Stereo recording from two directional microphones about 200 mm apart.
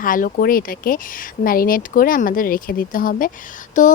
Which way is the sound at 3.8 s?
40° left (ahead or behind).